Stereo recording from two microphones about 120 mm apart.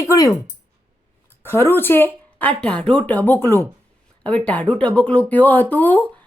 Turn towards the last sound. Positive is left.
turn(degrees=15)  # may be behind; listen again after turning